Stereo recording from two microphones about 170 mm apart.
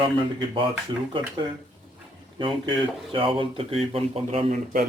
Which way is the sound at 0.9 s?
25° right (ahead or behind).